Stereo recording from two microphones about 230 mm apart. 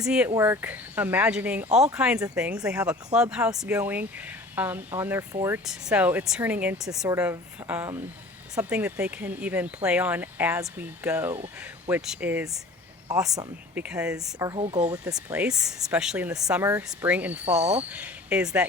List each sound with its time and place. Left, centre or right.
0.0 s speech: centre
13.3 s speech: centre
13.8 s speech: centre
14.3 s speech: centre
15.0 s speech: centre